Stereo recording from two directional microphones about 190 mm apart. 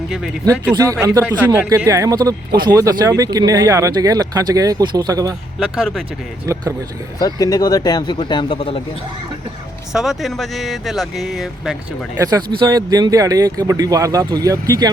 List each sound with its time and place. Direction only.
0.6 s speech: 15° right (ahead or behind)
5.5 s speech: centre (ahead or behind)
6.4 s speech: 15° right (ahead or behind)
7.2 s speech: 20° left (ahead or behind)
9.9 s speech: centre (ahead or behind)
12.1 s speech: 20° right (ahead or behind)